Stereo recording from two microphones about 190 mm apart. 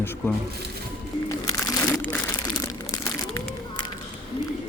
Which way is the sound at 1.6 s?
15° left (ahead or behind).